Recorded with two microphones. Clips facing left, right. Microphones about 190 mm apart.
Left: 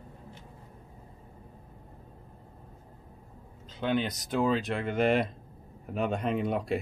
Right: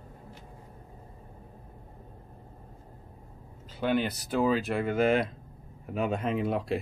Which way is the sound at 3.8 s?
5° right (ahead or behind).